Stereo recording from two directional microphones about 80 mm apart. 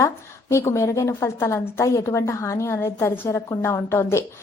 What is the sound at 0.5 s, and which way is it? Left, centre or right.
Speech, left.